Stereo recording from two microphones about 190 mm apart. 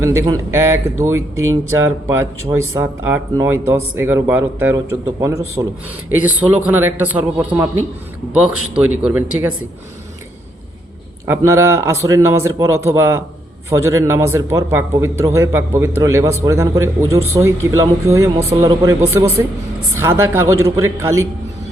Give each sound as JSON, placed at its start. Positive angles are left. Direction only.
{"t": 0.0, "sound": "a man's voice", "side_deg": -15}
{"t": 11.3, "sound": "a man's voice", "side_deg": -15}